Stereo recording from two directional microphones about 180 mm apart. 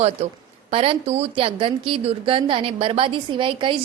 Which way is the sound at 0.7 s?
35° right (ahead or behind).